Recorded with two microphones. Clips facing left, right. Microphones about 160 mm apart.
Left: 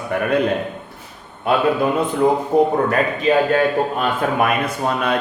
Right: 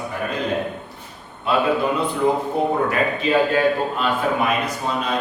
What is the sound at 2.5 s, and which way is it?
Speech, 45° left (ahead or behind).